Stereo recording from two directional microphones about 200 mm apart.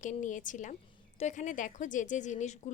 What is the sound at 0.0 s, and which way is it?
A woman's voice, 40° left (ahead or behind).